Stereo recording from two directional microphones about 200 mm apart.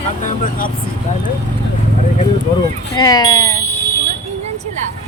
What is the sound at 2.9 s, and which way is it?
Speech, 20° left (ahead or behind).